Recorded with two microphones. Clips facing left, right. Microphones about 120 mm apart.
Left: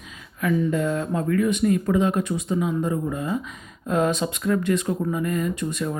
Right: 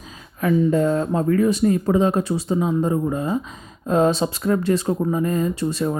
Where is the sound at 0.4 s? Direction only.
35° right (ahead or behind).